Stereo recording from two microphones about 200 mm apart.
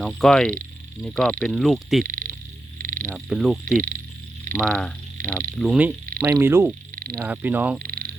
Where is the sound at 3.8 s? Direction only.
45° right (ahead or behind).